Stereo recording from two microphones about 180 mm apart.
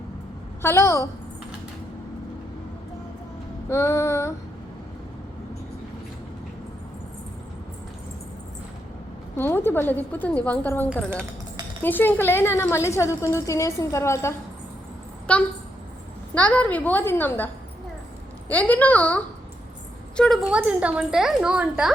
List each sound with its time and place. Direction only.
0.6 s a woman's voice: 15° left (ahead or behind)
3.7 s a woman's voice: 15° left (ahead or behind)
9.4 s a woman's voice: 15° left (ahead or behind)
18.5 s a woman's voice: 10° left (ahead or behind)